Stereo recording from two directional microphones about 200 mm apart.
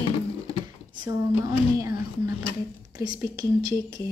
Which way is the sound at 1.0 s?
15° right (ahead or behind).